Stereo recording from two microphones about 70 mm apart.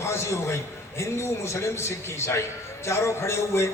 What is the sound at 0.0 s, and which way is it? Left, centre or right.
A man's voice, left.